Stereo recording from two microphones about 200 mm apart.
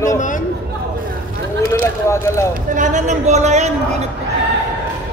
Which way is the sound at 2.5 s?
40° right (ahead or behind).